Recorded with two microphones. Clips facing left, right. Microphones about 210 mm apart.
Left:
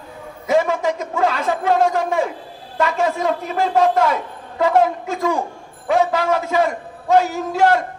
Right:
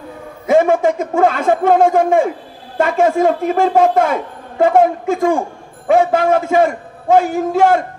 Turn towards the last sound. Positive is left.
turn(degrees=-50)  # may be behind; listen again after turning